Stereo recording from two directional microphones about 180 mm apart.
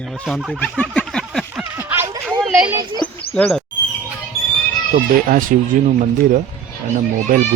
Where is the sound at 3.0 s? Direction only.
10° left (ahead or behind).